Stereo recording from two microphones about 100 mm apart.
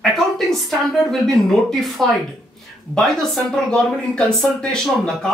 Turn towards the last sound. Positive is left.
turn(degrees=5)  # may be behind; listen again after turning